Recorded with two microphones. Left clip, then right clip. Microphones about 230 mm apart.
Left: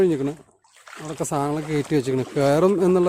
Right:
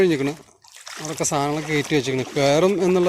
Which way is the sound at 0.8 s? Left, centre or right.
Right.